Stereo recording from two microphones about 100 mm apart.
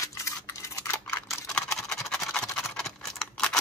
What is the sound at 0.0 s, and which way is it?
Scissors, 30° left (ahead or behind).